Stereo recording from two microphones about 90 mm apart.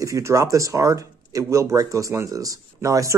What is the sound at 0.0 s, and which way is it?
Speech, 35° right (ahead or behind).